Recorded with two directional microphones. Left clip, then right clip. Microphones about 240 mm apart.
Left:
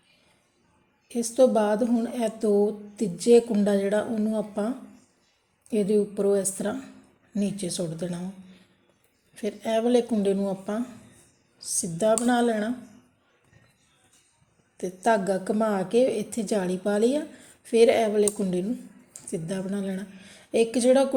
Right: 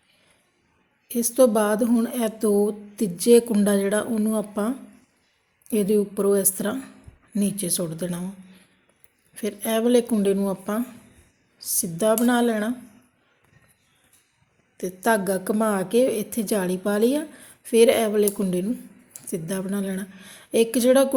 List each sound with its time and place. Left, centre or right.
1.0 s a woman's voice: centre
9.3 s a woman's voice: centre
14.8 s a woman's voice: centre